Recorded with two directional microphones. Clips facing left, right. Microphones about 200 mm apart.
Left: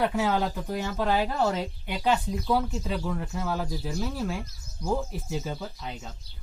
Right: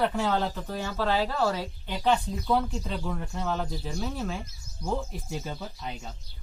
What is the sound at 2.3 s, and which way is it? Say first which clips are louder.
Speech: even; centre (ahead or behind).